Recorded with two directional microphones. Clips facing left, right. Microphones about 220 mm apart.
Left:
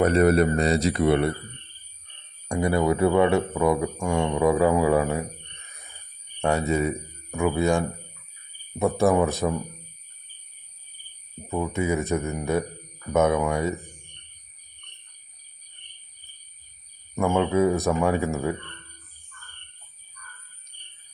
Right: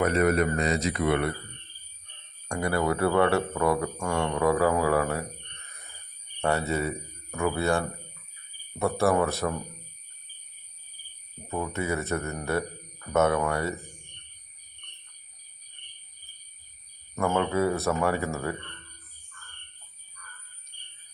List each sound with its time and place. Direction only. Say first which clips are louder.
0.0 s speech: left 5 dB; 35° left (ahead or behind)
2.5 s speech: left 4 dB; 20° left (ahead or behind)
6.4 s speech: left 4 dB; 15° left (ahead or behind)
11.4 s speech: left 4 dB; 10° left (ahead or behind)
17.2 s speech: left 4 dB; 10° left (ahead or behind)